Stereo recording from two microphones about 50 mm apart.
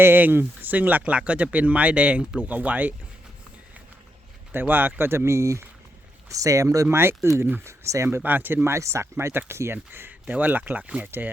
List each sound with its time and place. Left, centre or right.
0.0 s speech: right
4.6 s speech: right
6.2 s speech: right
6.9 s speech: right
7.6 s speech: right
8.2 s speech: right
8.6 s speech: right
9.7 s speech: right